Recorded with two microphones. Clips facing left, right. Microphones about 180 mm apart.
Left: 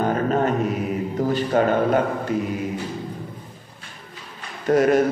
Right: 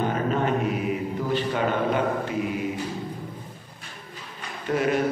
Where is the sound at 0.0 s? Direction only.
40° left (ahead or behind).